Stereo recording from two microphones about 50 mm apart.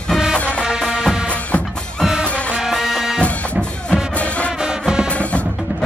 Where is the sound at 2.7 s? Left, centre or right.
Centre.